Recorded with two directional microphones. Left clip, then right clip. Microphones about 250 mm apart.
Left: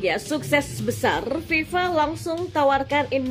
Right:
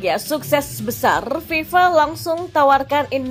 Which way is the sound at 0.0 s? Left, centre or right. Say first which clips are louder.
Right 4 dB; centre.